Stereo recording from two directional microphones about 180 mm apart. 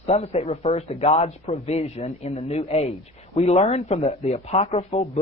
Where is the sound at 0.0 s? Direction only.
35° left (ahead or behind).